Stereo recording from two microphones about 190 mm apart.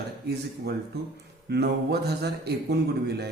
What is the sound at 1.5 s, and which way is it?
A man's voice, 60° right (ahead or behind).